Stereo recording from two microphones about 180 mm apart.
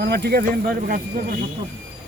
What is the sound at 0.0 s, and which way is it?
Speech, 65° right (ahead or behind).